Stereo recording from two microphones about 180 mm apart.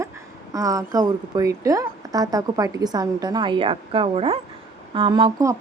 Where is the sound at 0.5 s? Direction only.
20° right (ahead or behind).